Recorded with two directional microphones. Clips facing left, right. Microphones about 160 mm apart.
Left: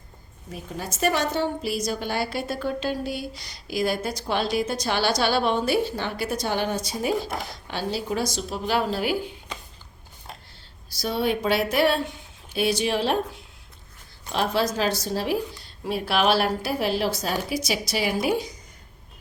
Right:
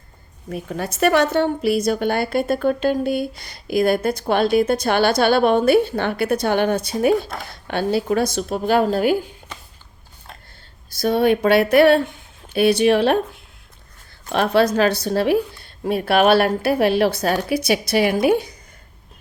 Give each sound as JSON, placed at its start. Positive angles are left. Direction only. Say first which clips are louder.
{"t": 0.5, "sound": "a woman's voice", "louder": "right 7 dB", "side_deg": -65}
{"t": 10.8, "sound": "a woman's voice", "louder": "right 8 dB", "side_deg": -55}
{"t": 14.3, "sound": "a woman's voice", "louder": "right 7 dB", "side_deg": -60}